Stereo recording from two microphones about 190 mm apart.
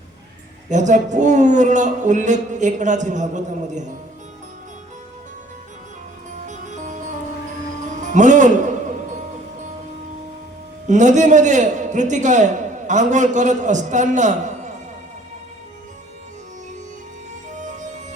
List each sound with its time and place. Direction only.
0.7 s a man's voice: 40° right (ahead or behind)
6.5 s music: 40° right (ahead or behind)
8.1 s music: 40° right (ahead or behind)
10.8 s a man's voice: 40° right (ahead or behind)